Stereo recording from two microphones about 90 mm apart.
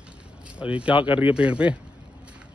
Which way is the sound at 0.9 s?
65° left (ahead or behind).